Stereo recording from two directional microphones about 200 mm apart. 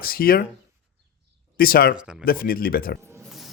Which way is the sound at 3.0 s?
15° right (ahead or behind).